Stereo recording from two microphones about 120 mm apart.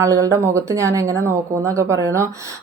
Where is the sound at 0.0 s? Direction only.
25° right (ahead or behind).